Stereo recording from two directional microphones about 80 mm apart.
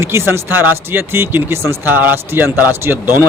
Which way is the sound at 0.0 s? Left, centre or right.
Right.